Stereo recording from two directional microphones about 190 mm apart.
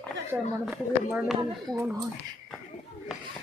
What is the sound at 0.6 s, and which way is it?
Speech, centre (ahead or behind).